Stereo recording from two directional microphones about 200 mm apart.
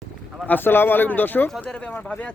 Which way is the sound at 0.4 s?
10° left (ahead or behind).